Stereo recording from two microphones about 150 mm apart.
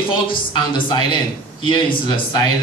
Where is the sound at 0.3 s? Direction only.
35° left (ahead or behind).